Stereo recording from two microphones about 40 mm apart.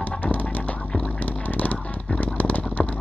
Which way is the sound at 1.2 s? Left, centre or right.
Left.